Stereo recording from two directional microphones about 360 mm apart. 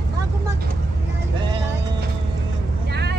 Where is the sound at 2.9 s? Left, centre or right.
Right.